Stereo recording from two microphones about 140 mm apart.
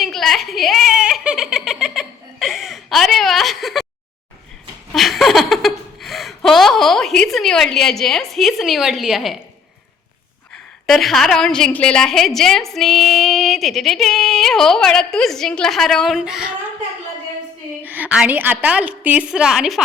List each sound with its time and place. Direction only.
0.0 s giggle: centre (ahead or behind)
4.9 s a sound: centre (ahead or behind)
10.5 s a woman's voice: centre (ahead or behind)
17.8 s a woman's voice: 10° right (ahead or behind)